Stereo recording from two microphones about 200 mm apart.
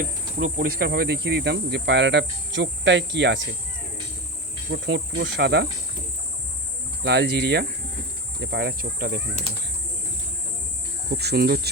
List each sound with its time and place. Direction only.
0.3 s speech: 45° right (ahead or behind)
4.7 s speech: 55° right (ahead or behind)
7.0 s speech: 55° right (ahead or behind)
11.2 s speech: 55° right (ahead or behind)